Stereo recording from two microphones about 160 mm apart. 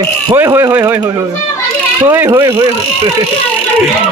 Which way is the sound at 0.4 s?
15° right (ahead or behind).